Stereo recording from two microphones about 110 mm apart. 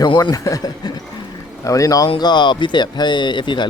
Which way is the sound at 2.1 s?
40° left (ahead or behind).